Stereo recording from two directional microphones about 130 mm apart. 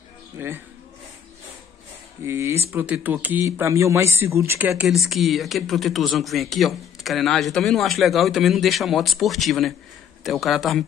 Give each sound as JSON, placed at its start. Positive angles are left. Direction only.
{"t": 0.4, "sound": "speech", "side_deg": -15}
{"t": 2.2, "sound": "speech", "side_deg": -20}
{"t": 4.8, "sound": "speech", "side_deg": 0}